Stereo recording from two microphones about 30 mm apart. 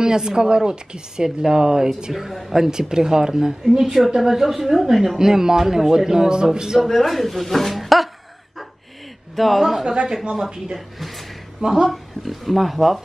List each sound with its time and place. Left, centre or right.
0.0 s speech: right
2.1 s a woman's voice: centre
2.9 s a woman's voice: right
4.2 s a woman's voice: centre; by 6.8 s right
6.8 s speech: centre
9.3 s speech: centre
9.6 s a woman's voice: centre
9.8 s speech: right
11.0 s speech: centre
11.6 s speech: centre
11.9 s speech: centre